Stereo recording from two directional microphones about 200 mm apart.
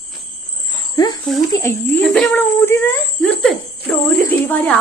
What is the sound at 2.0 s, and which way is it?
Speech, 5° left (ahead or behind).